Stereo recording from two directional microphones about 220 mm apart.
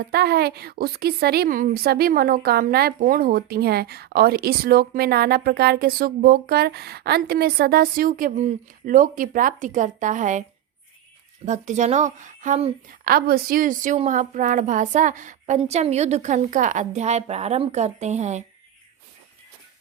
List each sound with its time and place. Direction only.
0.0 s a woman's voice: 45° right (ahead or behind)
11.4 s a woman's voice: 35° right (ahead or behind)
13.1 s a woman's voice: 45° right (ahead or behind)